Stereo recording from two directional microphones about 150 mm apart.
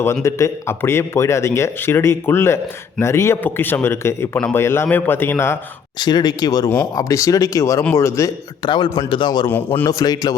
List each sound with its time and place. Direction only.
0.0 s a man's voice: 20° left (ahead or behind)
6.0 s a man's voice: 30° left (ahead or behind)